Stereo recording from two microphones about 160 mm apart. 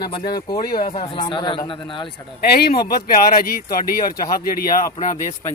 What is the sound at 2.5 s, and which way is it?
Speech, 80° left.